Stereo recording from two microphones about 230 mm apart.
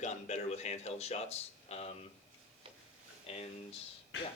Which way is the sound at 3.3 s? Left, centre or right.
Left.